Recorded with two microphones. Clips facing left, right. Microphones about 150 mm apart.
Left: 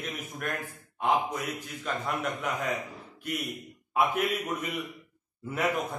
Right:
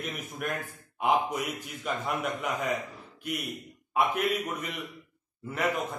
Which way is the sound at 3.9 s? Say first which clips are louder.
Even; centre (ahead or behind).